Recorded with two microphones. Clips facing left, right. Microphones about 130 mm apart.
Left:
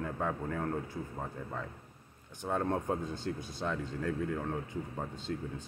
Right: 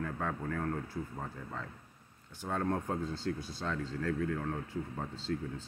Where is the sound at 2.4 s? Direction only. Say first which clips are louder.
Left 2 dB; 20° left (ahead or behind).